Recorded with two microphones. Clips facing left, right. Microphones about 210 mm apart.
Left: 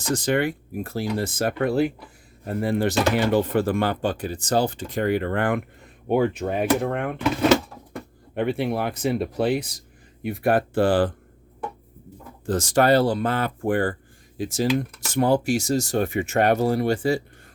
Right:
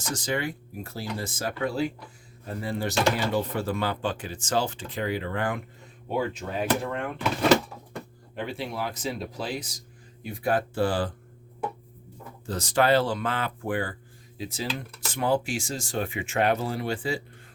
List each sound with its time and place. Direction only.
0.1 s speech: 55° left (ahead or behind)
8.4 s speech: 60° left (ahead or behind)
12.5 s speech: 45° left (ahead or behind)